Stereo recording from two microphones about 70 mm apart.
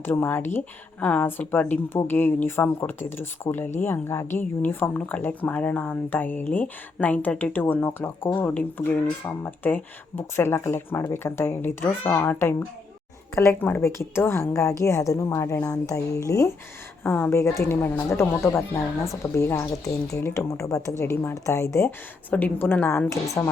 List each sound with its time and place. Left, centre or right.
0.0 s speech: left
13.3 s a woman's voice: left
13.6 s speech: left
13.8 s a woman's voice: left
17.0 s speech: left
17.3 s a woman's voice: left
21.8 s speech: left